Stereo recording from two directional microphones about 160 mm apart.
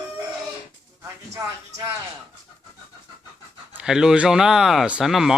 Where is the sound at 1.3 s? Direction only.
20° right (ahead or behind).